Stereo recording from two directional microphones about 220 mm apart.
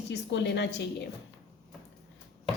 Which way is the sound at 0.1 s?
50° left (ahead or behind).